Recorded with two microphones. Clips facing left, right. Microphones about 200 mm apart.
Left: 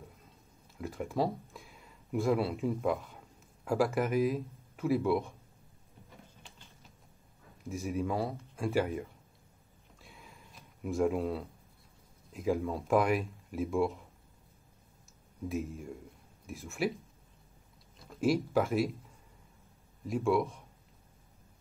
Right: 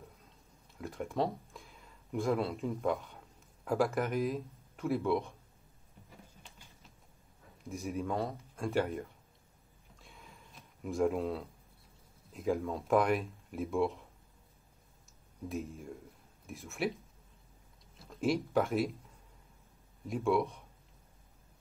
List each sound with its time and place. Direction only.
0.7 s speech: centre (ahead or behind)
7.6 s speech: centre (ahead or behind)
9.9 s a sound: centre (ahead or behind)
12.3 s speech: centre (ahead or behind)
15.4 s speech: centre (ahead or behind)
17.9 s speech: centre (ahead or behind)